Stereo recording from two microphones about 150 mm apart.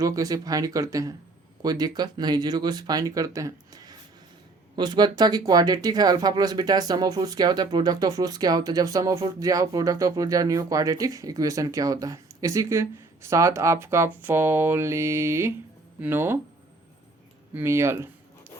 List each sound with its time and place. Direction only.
0.0 s speech: 25° right (ahead or behind)
17.5 s speech: 15° right (ahead or behind)